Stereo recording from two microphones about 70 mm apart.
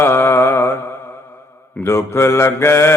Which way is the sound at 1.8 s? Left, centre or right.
Left.